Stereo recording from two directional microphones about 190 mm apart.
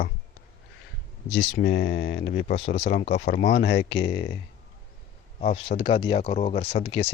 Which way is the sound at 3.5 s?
65° left (ahead or behind).